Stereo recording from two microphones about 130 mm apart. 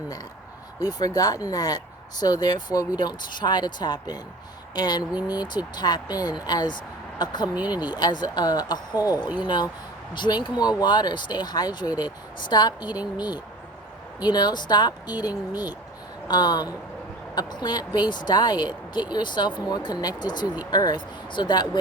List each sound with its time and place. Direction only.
0.8 s speech: 30° left (ahead or behind)